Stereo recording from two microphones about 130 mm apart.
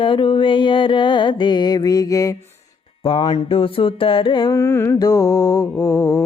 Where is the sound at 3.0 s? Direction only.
45° left (ahead or behind).